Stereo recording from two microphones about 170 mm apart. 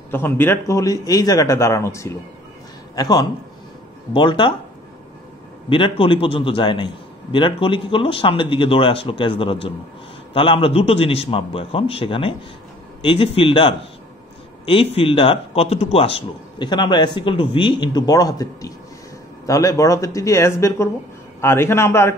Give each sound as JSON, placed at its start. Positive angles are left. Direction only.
{"t": 0.1, "sound": "a man's voice", "side_deg": 10}
{"t": 5.7, "sound": "a man's voice", "side_deg": 30}